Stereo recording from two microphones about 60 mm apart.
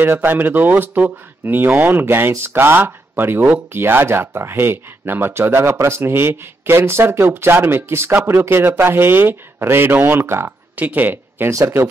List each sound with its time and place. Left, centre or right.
0.0 s speech: right
10.8 s speech: right
11.5 s speech: right